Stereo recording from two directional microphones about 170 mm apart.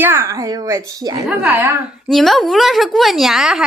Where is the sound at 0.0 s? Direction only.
15° right (ahead or behind).